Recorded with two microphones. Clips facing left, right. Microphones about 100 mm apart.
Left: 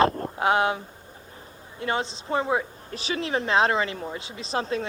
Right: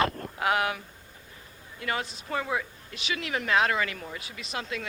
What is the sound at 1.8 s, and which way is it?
Speech, 25° left (ahead or behind).